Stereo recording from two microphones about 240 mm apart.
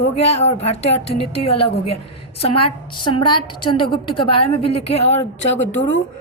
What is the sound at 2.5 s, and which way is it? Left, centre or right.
Speech, left.